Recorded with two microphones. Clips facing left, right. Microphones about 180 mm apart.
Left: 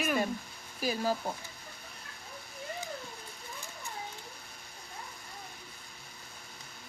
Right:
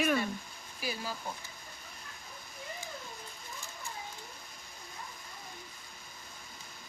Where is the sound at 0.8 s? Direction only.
45° left (ahead or behind).